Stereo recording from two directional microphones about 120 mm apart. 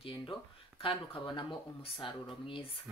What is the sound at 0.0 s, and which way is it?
Speech, 45° left (ahead or behind).